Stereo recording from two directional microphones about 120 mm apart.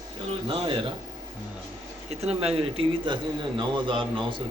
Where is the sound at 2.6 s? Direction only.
50° right (ahead or behind).